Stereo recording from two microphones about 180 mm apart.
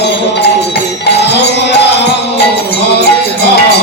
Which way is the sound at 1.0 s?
70° left (ahead or behind).